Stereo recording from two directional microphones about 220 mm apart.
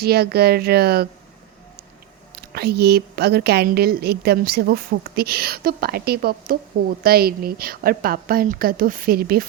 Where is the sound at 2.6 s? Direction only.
45° right (ahead or behind).